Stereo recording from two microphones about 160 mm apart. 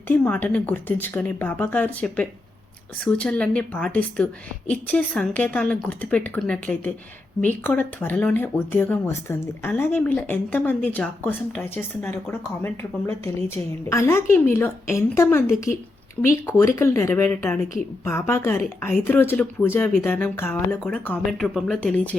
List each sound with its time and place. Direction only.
0.1 s speech: 10° left (ahead or behind)